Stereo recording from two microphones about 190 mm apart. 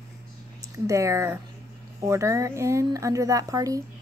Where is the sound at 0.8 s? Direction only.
15° right (ahead or behind).